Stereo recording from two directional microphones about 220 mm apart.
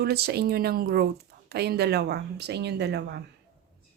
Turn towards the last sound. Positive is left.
turn(degrees=-50)  # may be behind; listen again after turning